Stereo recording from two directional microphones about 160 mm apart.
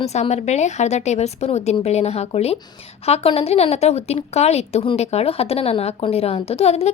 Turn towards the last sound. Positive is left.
turn(degrees=40)  # may be behind; listen again after turning